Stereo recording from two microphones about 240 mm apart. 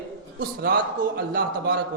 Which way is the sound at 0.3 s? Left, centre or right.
Right.